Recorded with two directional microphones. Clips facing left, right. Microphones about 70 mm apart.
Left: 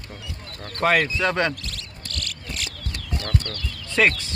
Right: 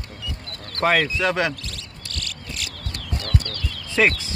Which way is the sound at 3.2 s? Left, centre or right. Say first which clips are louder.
Right 1 dB; left.